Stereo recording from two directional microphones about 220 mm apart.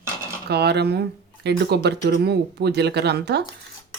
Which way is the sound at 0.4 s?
45° right (ahead or behind).